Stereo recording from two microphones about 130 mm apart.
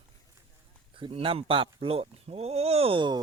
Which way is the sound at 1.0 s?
45° right (ahead or behind).